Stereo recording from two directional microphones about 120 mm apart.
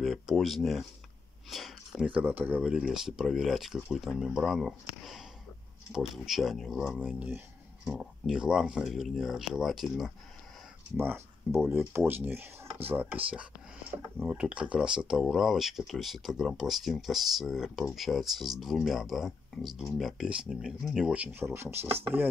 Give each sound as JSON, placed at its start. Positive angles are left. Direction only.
{"t": 0.0, "sound": "speech", "side_deg": 0}
{"t": 2.0, "sound": "speech", "side_deg": -10}
{"t": 7.0, "sound": "speech", "side_deg": -10}
{"t": 7.8, "sound": "speech", "side_deg": 0}
{"t": 11.0, "sound": "speech", "side_deg": -20}